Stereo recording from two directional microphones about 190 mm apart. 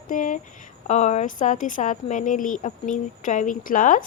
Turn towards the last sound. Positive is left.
turn(degrees=45)  # may be behind; listen again after turning